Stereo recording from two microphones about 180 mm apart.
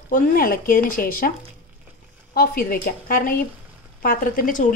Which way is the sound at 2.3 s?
55° left (ahead or behind).